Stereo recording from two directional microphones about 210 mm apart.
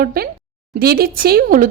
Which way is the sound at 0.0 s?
45° right (ahead or behind).